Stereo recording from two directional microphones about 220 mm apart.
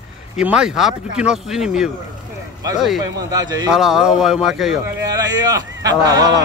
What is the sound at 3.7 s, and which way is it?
Speech, centre (ahead or behind).